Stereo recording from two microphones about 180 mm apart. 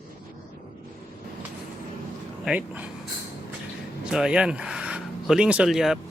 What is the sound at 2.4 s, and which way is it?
Speech, 5° right (ahead or behind).